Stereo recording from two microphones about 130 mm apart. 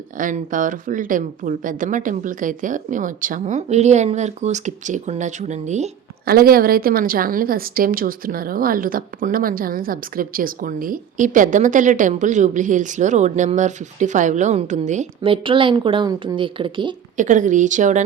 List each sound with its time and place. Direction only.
0.2 s a woman's voice: 90° right; by 5.9 s 65° right (ahead or behind)
6.9 s a woman's voice: 90° right; by 15.0 s 65° right (ahead or behind)
15.2 s a woman's voice: 40° right (ahead or behind)
17.2 s a woman's voice: 75° right (ahead or behind)